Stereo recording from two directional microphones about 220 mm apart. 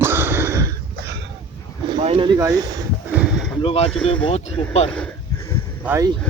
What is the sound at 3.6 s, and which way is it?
Speech, 25° left (ahead or behind).